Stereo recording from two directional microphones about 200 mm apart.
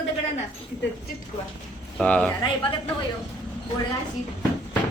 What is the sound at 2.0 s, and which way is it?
Speech, 5° left (ahead or behind).